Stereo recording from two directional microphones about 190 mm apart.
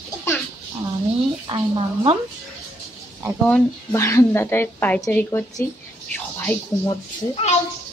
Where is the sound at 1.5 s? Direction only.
30° right (ahead or behind).